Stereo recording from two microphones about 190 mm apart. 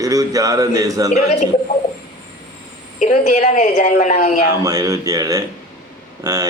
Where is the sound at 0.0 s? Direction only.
20° right (ahead or behind).